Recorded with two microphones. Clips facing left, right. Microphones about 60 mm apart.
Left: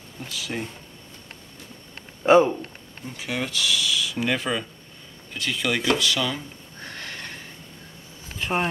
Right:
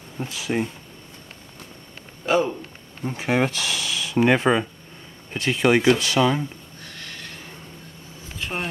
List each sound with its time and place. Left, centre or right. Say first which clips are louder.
0.2 s speech: right 6 dB; right
2.2 s speech: left 5 dB; left
3.0 s speech: right 8 dB; right
6.8 s neigh: left 4 dB; left
8.4 s a sound: left 4 dB; centre